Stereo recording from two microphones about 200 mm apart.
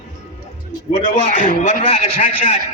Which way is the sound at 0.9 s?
40° left (ahead or behind).